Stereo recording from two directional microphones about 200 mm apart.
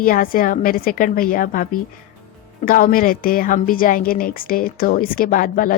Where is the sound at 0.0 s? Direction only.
45° left (ahead or behind).